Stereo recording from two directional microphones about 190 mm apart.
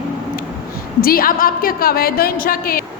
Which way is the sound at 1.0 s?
50° left (ahead or behind).